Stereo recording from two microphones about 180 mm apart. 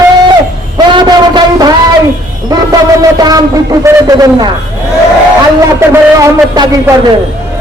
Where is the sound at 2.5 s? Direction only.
20° right (ahead or behind).